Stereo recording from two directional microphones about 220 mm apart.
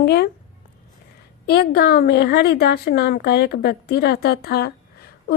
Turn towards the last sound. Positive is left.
turn(degrees=45)  # may be behind; listen again after turning